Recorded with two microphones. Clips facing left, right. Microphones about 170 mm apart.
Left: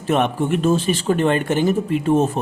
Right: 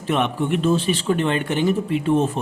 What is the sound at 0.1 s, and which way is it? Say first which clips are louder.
Speech: left 2 dB; 45° left (ahead or behind).